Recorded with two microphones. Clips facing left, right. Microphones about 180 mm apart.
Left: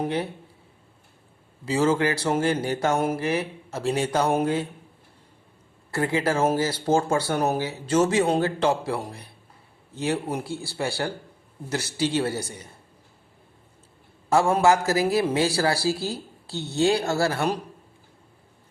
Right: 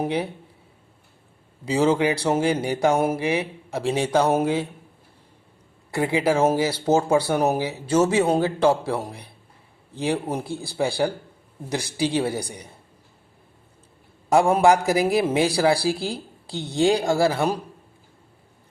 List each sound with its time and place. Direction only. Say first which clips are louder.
0.0 s speech: right 2 dB; 10° right (ahead or behind)
1.6 s speech: right 2 dB; 15° right (ahead or behind)
5.9 s speech: right 3 dB; 15° right (ahead or behind)
14.3 s speech: right 2 dB; 15° right (ahead or behind)